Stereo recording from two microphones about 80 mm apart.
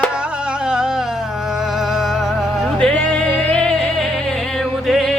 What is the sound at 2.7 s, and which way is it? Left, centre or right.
Music, centre.